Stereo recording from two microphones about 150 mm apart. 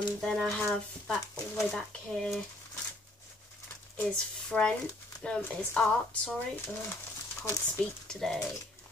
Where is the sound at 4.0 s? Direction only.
5° left (ahead or behind).